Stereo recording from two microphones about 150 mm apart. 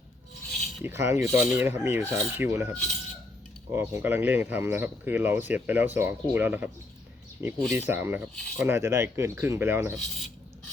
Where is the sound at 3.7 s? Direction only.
15° right (ahead or behind).